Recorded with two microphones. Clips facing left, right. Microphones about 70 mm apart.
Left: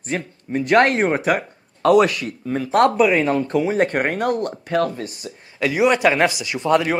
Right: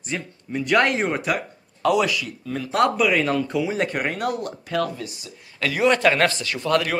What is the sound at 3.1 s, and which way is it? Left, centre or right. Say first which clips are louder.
Speech: left 3 dB; left.